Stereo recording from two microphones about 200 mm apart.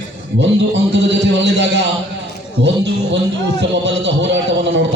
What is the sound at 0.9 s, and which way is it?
Speech, 60° right (ahead or behind).